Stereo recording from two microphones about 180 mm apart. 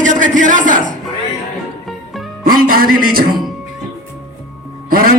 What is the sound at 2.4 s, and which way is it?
Speech, 55° right (ahead or behind).